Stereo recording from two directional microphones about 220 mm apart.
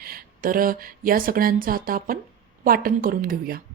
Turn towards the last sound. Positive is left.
turn(degrees=-40)  # may be behind; listen again after turning